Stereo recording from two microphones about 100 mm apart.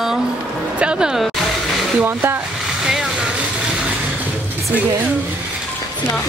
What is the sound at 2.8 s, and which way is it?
Vehicle, 5° right (ahead or behind).